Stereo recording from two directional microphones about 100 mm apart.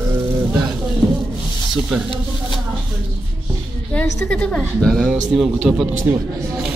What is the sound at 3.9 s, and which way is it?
Speech, 10° left (ahead or behind).